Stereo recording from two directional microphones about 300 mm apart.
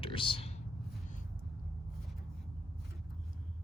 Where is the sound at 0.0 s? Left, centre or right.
Centre.